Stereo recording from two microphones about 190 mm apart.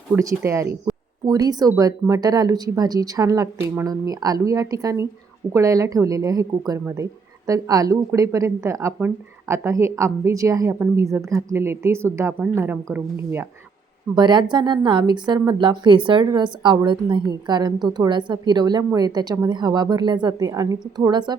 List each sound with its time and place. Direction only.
0.2 s a woman's voice: 15° right (ahead or behind)
14.2 s a woman's voice: 25° right (ahead or behind)